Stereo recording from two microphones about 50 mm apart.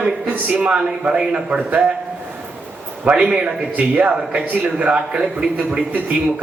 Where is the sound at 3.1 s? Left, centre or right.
Centre.